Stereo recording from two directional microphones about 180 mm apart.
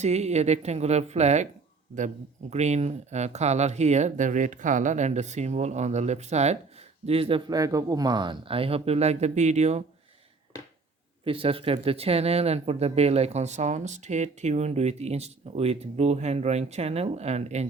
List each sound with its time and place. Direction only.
0.0 s speech: 40° right (ahead or behind)
2.5 s speech: 40° right (ahead or behind)
11.3 s speech: 30° right (ahead or behind)